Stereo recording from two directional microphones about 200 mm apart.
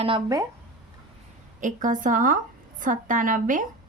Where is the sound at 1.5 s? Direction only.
40° right (ahead or behind).